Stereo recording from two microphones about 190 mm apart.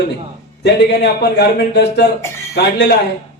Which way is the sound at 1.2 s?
60° left (ahead or behind).